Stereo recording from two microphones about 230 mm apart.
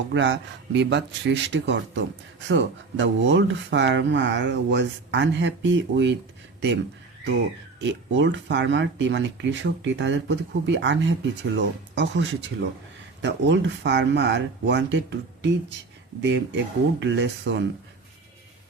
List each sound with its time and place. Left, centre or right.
0.1 s speech: right
7.8 s speech: right